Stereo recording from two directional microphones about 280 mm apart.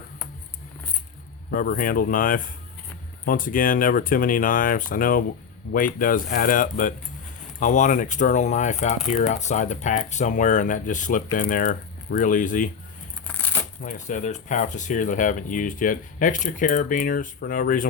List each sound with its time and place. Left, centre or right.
1.5 s speech: left
13.2 s coin: centre
13.8 s speech: left